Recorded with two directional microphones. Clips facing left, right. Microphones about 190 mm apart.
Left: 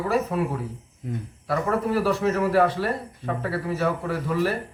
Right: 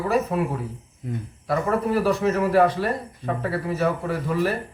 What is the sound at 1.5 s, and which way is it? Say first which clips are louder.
Speech: right 1 dB; 15° right (ahead or behind).